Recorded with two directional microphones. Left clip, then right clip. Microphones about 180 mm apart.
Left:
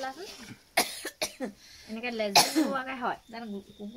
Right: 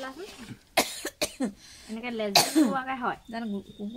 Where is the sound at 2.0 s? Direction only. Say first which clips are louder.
Even; 35° left (ahead or behind).